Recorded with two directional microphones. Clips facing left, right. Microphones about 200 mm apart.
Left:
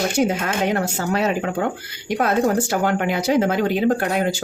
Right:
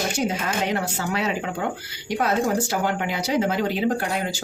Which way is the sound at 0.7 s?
45° left (ahead or behind).